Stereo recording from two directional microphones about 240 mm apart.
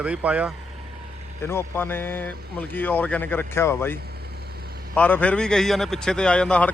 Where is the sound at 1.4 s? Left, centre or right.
Centre.